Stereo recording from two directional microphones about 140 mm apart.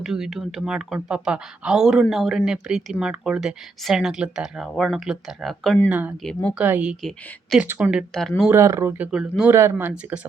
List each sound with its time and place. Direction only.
0.0 s speech: 5° right (ahead or behind)
5.9 s speech: 10° right (ahead or behind)
6.2 s speech: 5° left (ahead or behind)
6.6 s speech: 10° right (ahead or behind)
8.4 s speech: 20° right (ahead or behind)
9.0 s speech: 5° right (ahead or behind)
9.5 s speech: 20° right (ahead or behind)